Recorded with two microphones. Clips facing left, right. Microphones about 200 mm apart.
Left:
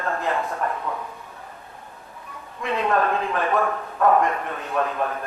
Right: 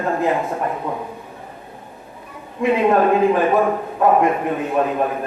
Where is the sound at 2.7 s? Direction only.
20° right (ahead or behind).